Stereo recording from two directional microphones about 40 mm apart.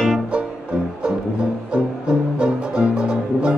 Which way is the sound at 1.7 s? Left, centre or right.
Right.